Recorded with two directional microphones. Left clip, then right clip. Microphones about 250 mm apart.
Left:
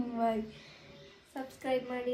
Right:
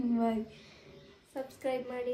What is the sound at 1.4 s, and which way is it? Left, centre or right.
Speech, centre.